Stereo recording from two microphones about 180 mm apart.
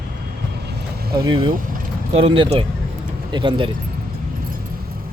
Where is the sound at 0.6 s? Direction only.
65° right (ahead or behind).